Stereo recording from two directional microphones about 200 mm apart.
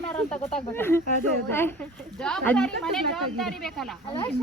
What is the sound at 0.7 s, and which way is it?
Speech, 10° left (ahead or behind).